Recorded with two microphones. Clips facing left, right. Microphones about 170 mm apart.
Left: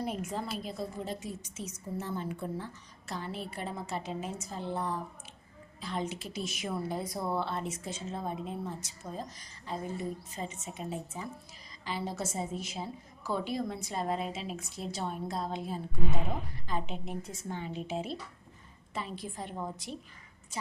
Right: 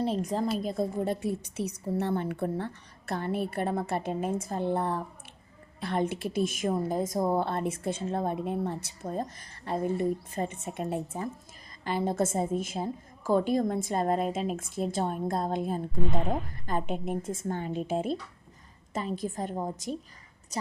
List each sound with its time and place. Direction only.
0.0 s a woman's voice: 35° right (ahead or behind); by 15.8 s 50° right (ahead or behind)
16.0 s a woman's voice: 5° left (ahead or behind)
16.6 s a woman's voice: 50° right (ahead or behind)